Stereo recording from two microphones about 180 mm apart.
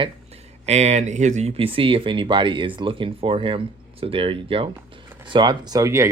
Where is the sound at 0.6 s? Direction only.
40° right (ahead or behind).